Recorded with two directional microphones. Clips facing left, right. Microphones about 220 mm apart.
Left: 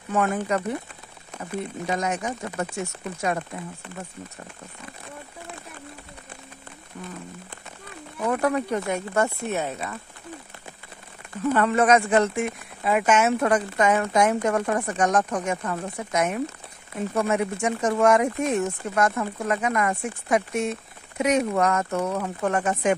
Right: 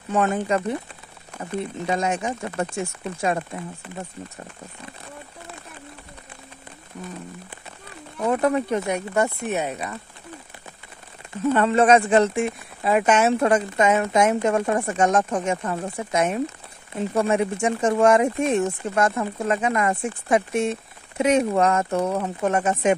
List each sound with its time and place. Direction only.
0.1 s speech: 25° right (ahead or behind)
2.0 s speech: 25° right (ahead or behind)
8.3 s speech: 25° right (ahead or behind)
11.5 s speech: 25° right (ahead or behind)